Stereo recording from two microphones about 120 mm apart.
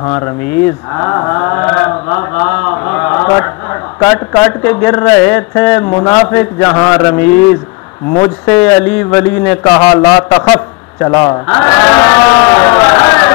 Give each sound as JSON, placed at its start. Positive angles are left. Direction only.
{"t": 0.1, "sound": "cattle", "side_deg": 15}
{"t": 4.0, "sound": "a man's voice", "side_deg": 20}
{"t": 6.0, "sound": "cattle", "side_deg": 20}
{"t": 8.5, "sound": "a man's voice", "side_deg": 15}
{"t": 11.4, "sound": "a sound", "side_deg": 20}